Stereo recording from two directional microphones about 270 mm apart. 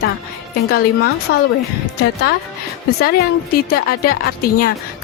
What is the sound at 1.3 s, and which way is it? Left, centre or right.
Speech, left.